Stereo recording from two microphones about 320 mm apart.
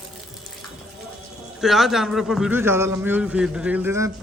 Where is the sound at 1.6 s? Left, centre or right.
Centre.